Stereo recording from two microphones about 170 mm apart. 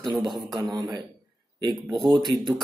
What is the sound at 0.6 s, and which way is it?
Speech, 20° right (ahead or behind).